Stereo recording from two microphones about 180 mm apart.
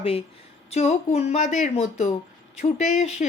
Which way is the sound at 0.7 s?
35° left (ahead or behind).